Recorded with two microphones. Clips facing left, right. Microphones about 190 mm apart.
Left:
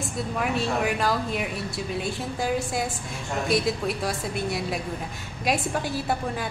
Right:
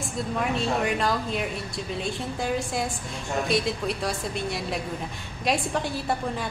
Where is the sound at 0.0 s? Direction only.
5° left (ahead or behind).